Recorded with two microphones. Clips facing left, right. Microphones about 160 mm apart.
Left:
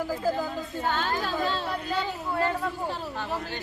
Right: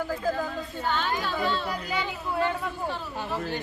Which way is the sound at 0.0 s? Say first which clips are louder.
Left 1 dB; 10° left (ahead or behind).